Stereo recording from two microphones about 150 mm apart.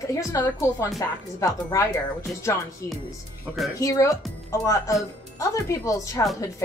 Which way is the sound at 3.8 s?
20° left (ahead or behind).